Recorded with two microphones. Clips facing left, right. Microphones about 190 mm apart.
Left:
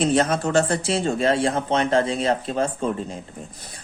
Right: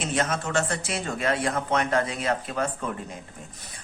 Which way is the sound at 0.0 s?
35° left (ahead or behind).